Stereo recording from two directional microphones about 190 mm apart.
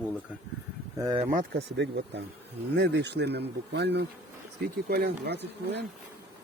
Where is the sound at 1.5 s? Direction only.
65° right (ahead or behind).